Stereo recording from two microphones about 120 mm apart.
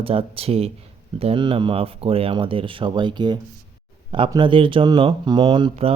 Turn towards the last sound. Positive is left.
turn(degrees=-40)  # may be behind; listen again after turning